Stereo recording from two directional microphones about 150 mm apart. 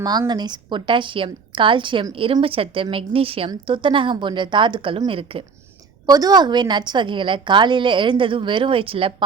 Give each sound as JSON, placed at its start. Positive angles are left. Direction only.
{"t": 0.0, "sound": "a woman's voice", "side_deg": -25}
{"t": 6.1, "sound": "a woman's voice", "side_deg": -25}